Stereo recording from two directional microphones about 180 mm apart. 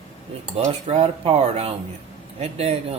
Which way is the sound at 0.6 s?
35° right (ahead or behind).